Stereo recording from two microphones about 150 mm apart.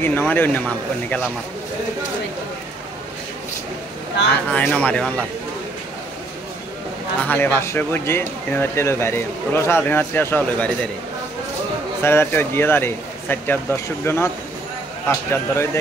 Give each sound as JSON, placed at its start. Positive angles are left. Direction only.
{"t": 0.0, "sound": "speech", "side_deg": 10}
{"t": 4.5, "sound": "speech", "side_deg": 10}
{"t": 7.2, "sound": "speech", "side_deg": 15}
{"t": 12.0, "sound": "speech", "side_deg": 15}